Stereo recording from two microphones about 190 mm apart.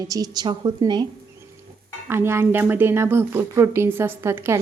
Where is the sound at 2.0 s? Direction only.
10° right (ahead or behind).